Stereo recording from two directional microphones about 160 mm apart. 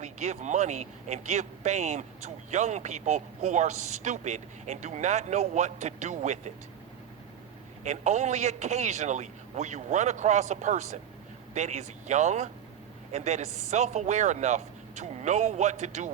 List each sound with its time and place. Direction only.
0.0 s speech: 45° right (ahead or behind)
7.9 s a woman's voice: 45° right (ahead or behind)